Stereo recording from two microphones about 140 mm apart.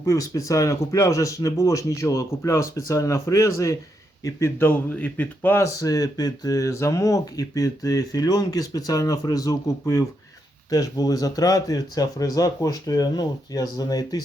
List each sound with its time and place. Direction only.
0.0 s speech: 25° left (ahead or behind)